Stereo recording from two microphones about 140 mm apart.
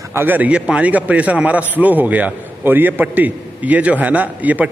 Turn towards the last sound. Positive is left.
turn(degrees=-10)  # may be behind; listen again after turning